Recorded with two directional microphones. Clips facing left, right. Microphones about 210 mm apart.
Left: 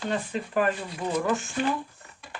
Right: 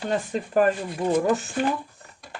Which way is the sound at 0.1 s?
45° right (ahead or behind).